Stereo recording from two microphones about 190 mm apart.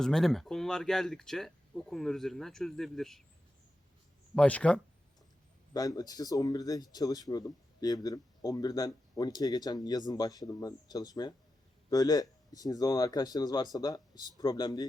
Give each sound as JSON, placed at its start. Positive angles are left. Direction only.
{"t": 0.0, "sound": "speech", "side_deg": 0}
{"t": 4.4, "sound": "speech", "side_deg": 5}
{"t": 5.7, "sound": "speech", "side_deg": 20}